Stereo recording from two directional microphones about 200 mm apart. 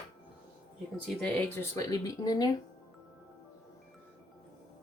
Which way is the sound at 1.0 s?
5° left (ahead or behind).